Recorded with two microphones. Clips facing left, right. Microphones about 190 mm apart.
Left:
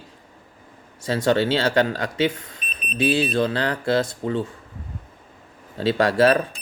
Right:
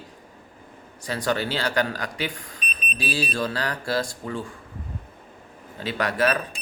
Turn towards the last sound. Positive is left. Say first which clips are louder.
# left 6 dB
turn(degrees=30)  # may be behind; listen again after turning